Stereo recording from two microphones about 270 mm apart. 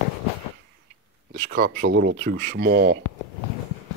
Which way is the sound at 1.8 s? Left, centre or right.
Right.